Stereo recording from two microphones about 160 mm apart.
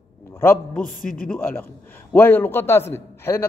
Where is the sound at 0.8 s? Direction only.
60° left (ahead or behind).